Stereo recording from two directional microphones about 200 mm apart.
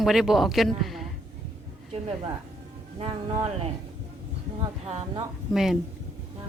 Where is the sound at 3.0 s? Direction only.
25° right (ahead or behind).